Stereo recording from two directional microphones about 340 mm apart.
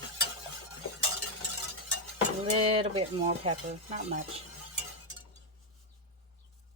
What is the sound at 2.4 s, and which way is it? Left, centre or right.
Speech, centre.